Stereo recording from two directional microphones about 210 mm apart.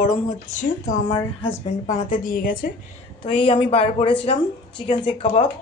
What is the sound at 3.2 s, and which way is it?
Speech, 25° left (ahead or behind).